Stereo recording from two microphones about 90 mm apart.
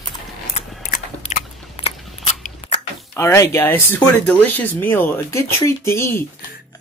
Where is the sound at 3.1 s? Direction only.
30° left (ahead or behind).